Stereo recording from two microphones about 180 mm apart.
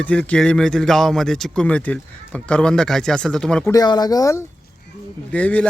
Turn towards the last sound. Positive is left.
turn(degrees=10)  # may be behind; listen again after turning